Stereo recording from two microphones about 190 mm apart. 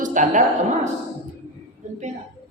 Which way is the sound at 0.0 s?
40° right (ahead or behind).